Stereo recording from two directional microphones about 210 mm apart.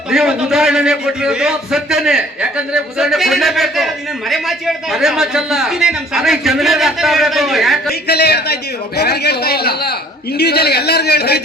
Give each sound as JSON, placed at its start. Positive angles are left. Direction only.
{"t": 0.1, "sound": "a man's voice", "side_deg": 0}
{"t": 7.9, "sound": "a man's voice", "side_deg": 50}